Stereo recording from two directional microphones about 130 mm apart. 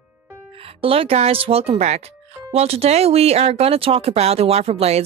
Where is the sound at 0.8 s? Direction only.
50° right (ahead or behind).